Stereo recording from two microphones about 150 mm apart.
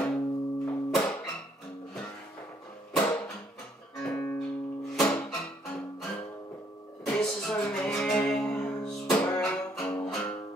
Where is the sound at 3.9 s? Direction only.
10° left (ahead or behind).